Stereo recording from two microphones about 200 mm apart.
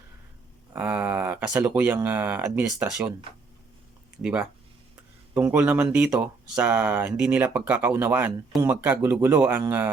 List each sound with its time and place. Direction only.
0.7 s speech: 5° right (ahead or behind)
4.2 s speech: 5° right (ahead or behind)